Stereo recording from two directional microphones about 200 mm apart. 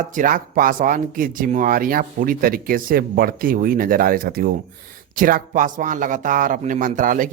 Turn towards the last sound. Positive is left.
turn(degrees=-40)  # may be behind; listen again after turning